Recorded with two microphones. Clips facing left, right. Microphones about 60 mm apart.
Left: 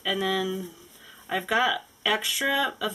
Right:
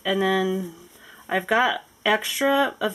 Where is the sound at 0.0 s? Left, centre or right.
Right.